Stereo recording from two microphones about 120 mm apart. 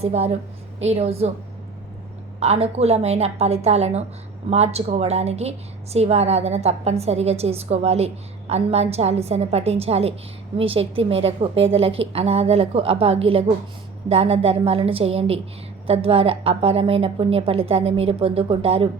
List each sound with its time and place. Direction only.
0.0 s a woman's voice: 60° right (ahead or behind)
2.4 s a woman's voice: 60° right (ahead or behind)